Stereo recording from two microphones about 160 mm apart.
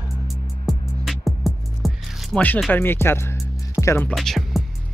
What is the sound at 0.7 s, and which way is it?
Music, centre (ahead or behind).